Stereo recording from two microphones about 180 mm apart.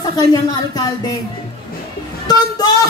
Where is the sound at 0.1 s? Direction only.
20° left (ahead or behind).